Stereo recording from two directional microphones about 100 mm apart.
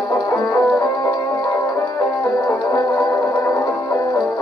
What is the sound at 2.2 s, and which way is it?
Music, 30° left (ahead or behind).